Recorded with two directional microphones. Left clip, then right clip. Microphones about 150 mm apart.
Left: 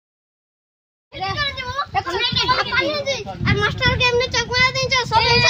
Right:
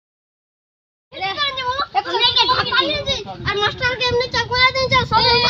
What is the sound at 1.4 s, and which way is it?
Children playing, 30° left (ahead or behind).